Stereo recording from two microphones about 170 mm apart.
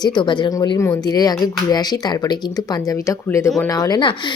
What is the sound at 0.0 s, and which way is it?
A woman's voice, 25° left (ahead or behind).